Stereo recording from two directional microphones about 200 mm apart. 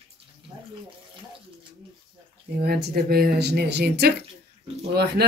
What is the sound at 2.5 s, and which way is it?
Speech, 50° right (ahead or behind).